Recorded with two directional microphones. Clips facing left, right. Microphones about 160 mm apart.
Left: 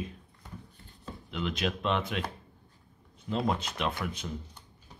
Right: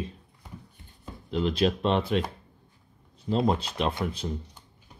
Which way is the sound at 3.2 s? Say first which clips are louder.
Right 5 dB; 30° right (ahead or behind).